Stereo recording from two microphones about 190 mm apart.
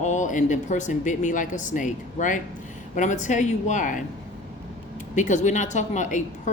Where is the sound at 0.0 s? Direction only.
40° left (ahead or behind).